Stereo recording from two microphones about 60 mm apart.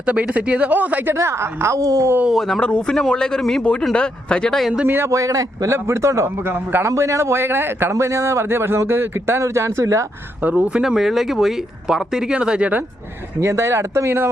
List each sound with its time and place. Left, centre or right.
0.0 s speech: centre
1.1 s a man's voice: right
1.8 s a man's voice: right
2.3 s speech: centre
2.6 s speech: centre
5.0 s a man's voice: right
5.7 s a man's voice: right
6.2 s a man's voice: right
6.8 s a man's voice: right
9.4 s speech: right
10.5 s speech: centre
13.4 s a man's voice: right